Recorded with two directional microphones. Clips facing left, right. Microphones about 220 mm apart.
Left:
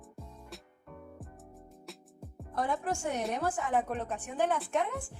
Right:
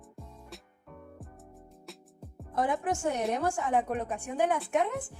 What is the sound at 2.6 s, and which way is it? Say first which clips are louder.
A woman's voice: right 3 dB; 20° right (ahead or behind).